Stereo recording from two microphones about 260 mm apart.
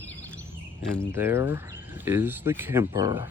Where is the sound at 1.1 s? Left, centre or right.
Centre.